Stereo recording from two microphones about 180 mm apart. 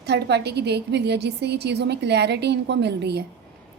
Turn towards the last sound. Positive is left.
turn(degrees=-65)  # may be behind; listen again after turning